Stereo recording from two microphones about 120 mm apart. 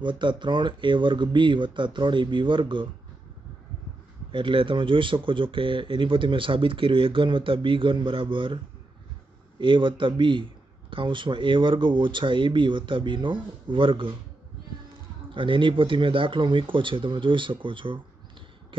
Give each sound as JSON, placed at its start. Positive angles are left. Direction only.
{"t": 0.0, "sound": "speech", "side_deg": -40}
{"t": 4.3, "sound": "speech", "side_deg": -45}
{"t": 9.6, "sound": "speech", "side_deg": -45}
{"t": 15.3, "sound": "speech", "side_deg": -45}